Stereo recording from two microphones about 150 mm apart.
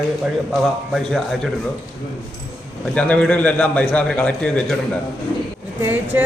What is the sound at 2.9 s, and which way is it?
A man's voice, 10° left (ahead or behind).